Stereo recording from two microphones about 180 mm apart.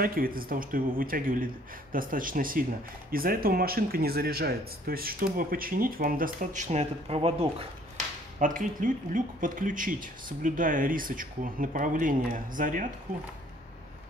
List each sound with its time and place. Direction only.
0.0 s speech: 55° right (ahead or behind); by 7.3 s 35° right (ahead or behind)
8.4 s speech: 45° right (ahead or behind)